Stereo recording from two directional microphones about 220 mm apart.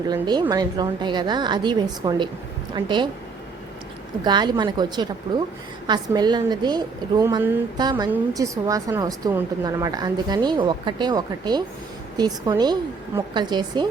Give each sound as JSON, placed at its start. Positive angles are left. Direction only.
{"t": 0.1, "sound": "a woman's voice", "side_deg": -20}
{"t": 4.2, "sound": "a woman's voice", "side_deg": -20}